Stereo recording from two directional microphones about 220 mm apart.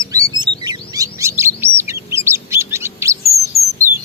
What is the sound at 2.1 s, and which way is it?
Bird, 10° right (ahead or behind).